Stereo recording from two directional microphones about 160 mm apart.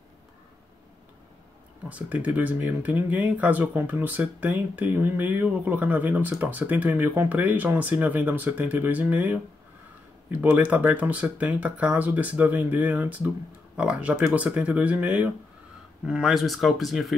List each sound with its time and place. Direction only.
1.9 s speech: 10° right (ahead or behind)